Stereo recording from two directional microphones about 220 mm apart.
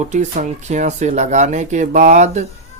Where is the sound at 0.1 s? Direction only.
30° right (ahead or behind).